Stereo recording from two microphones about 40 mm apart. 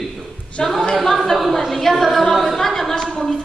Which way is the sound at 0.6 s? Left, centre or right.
Centre.